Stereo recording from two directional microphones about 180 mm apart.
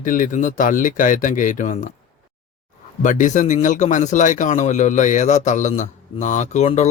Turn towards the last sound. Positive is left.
turn(degrees=40)  # may be behind; listen again after turning